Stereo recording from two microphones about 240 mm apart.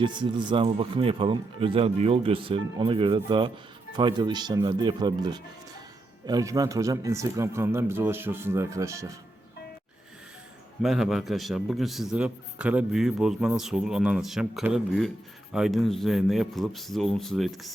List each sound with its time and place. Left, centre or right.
0.0 s speech: centre
10.8 s a man's voice: centre